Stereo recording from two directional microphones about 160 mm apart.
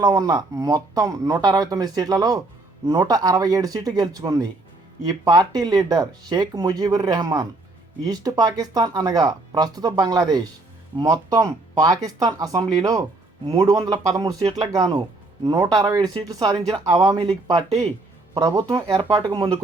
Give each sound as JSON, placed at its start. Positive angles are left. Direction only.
{"t": 0.0, "sound": "speech", "side_deg": -25}
{"t": 18.3, "sound": "speech", "side_deg": -25}